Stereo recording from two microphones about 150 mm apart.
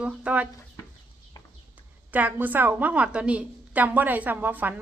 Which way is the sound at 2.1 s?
10° right (ahead or behind).